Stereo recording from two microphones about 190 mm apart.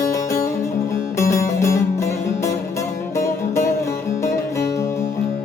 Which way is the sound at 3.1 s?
15° left (ahead or behind).